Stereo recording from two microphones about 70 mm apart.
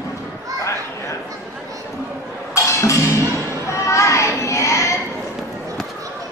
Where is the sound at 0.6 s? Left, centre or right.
Left.